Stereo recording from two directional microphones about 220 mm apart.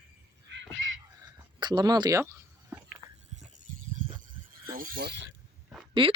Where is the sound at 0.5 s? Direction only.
55° right (ahead or behind).